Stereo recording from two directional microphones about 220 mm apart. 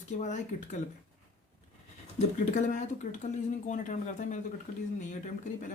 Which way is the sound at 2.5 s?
35° left (ahead or behind).